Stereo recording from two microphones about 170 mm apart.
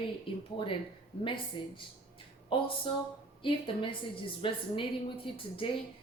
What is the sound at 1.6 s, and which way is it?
A woman's voice, 30° left (ahead or behind).